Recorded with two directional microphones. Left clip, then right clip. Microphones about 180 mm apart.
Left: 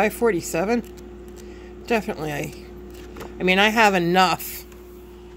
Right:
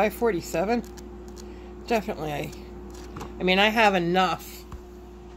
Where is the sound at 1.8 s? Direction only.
20° left (ahead or behind).